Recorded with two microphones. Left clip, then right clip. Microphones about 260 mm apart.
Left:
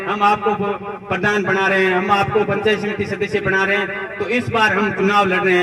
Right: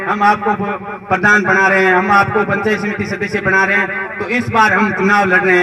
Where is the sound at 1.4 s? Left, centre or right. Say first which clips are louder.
Right 5 dB; left.